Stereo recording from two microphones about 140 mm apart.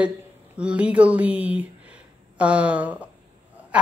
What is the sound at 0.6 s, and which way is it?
A woman's voice, 10° right (ahead or behind).